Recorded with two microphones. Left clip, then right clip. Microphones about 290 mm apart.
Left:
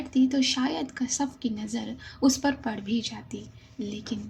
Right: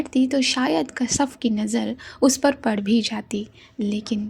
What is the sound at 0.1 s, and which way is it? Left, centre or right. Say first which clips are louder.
Speech: right 3 dB; right.